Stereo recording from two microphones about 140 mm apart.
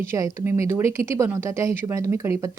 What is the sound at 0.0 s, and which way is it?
A woman's voice, 20° right (ahead or behind).